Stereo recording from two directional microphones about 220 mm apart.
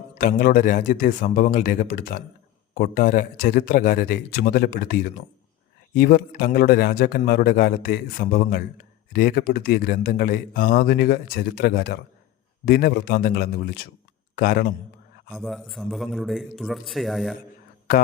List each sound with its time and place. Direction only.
0.1 s a man's voice: 35° left (ahead or behind)
15.3 s a man's voice: centre (ahead or behind)